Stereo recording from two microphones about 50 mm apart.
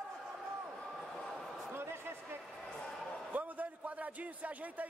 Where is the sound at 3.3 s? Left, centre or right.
Right.